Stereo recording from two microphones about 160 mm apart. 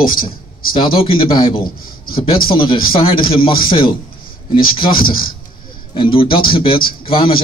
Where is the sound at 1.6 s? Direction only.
65° left (ahead or behind).